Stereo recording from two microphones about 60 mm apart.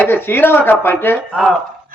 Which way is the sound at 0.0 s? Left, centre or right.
Left.